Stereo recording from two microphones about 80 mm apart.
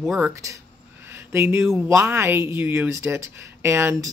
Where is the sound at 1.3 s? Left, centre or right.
Right.